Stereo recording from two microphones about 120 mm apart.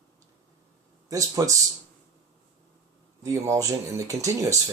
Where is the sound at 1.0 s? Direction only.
30° right (ahead or behind).